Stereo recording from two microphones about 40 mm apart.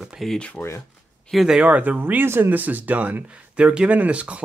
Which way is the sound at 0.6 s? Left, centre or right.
Left.